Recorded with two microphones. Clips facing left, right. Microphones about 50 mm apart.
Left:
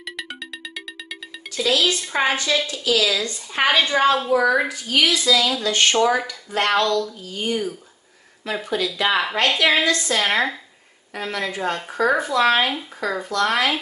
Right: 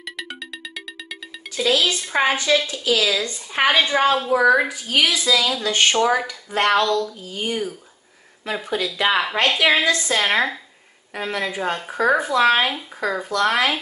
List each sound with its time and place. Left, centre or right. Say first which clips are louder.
0.0 s music: even; centre
1.6 s speech: even; right
2.0 s a woman's voice: right 1 dB; centre
2.3 s a woman's voice: right 2 dB; centre